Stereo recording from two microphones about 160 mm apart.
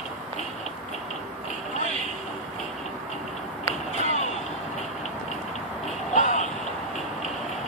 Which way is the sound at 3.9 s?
45° left (ahead or behind).